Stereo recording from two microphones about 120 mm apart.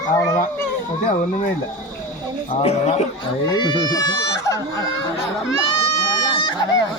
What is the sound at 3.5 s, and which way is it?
Speech, 35° left (ahead or behind).